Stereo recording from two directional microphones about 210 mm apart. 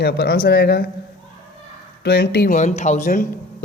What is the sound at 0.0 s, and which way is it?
Speech, 50° left (ahead or behind).